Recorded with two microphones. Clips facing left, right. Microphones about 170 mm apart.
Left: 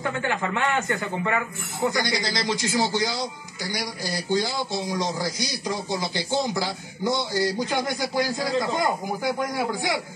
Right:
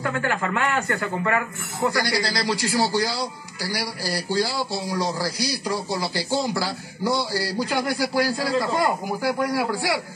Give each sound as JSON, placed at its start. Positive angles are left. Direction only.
{"t": 0.0, "sound": "a man's voice", "side_deg": 20}